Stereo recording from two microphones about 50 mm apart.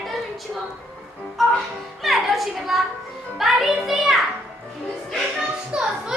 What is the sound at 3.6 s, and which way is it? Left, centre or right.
Children playing, centre.